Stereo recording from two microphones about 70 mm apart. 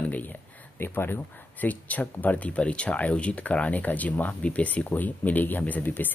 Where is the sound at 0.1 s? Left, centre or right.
Left.